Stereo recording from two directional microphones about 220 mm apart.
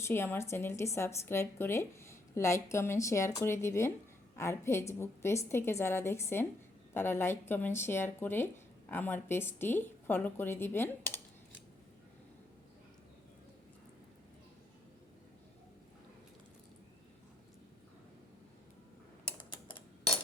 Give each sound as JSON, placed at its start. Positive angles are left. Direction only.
{"t": 0.0, "sound": "a woman's voice", "side_deg": 10}
{"t": 19.4, "sound": "typing", "side_deg": 20}